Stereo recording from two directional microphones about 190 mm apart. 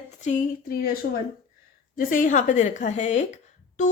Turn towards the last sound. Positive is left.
turn(degrees=40)  # may be behind; listen again after turning